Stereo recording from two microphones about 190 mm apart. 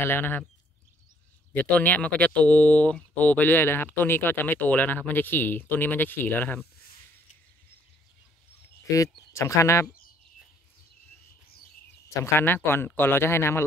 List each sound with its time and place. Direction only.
0.0 s speech: 10° left (ahead or behind)
1.5 s speech: 10° left (ahead or behind)
8.8 s speech: 15° left (ahead or behind)
12.1 s speech: 15° left (ahead or behind)